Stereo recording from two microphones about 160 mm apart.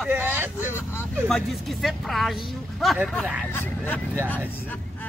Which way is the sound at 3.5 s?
15° left (ahead or behind).